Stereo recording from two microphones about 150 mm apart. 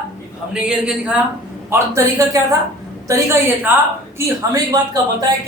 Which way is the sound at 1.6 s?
20° right (ahead or behind).